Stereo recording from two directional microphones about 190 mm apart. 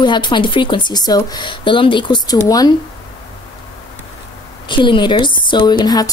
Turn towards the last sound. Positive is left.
turn(degrees=20)  # may be behind; listen again after turning